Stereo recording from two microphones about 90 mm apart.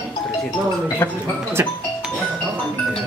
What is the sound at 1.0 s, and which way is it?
Speech, 25° left (ahead or behind).